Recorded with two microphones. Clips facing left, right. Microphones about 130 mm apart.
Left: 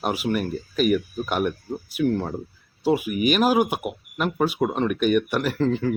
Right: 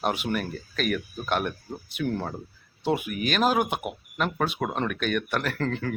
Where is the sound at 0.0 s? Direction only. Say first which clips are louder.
Left 3 dB; 5° left (ahead or behind).